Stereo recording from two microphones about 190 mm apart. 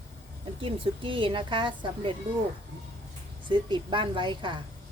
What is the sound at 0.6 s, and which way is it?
Speech, 25° right (ahead or behind).